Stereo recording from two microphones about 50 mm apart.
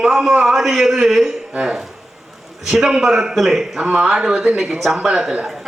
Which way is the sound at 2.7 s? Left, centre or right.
Centre.